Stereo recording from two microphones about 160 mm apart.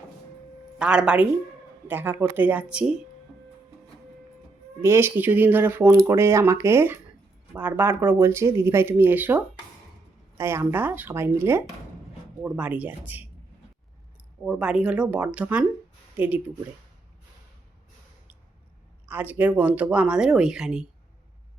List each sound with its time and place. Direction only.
0.8 s speech: 5° right (ahead or behind)
4.8 s speech: 15° right (ahead or behind)
14.4 s speech: 5° right (ahead or behind)
19.0 s speech: 10° right (ahead or behind)